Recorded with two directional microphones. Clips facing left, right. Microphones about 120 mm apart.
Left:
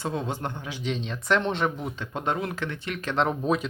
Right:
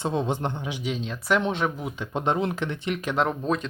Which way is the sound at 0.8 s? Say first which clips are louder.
Left 1 dB; centre (ahead or behind).